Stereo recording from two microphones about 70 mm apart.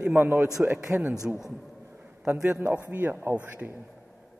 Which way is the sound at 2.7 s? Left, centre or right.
Right.